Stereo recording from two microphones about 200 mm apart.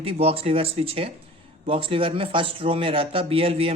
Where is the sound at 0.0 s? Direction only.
30° right (ahead or behind).